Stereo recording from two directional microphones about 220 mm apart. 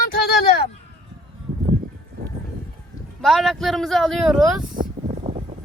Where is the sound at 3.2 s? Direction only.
Centre (ahead or behind).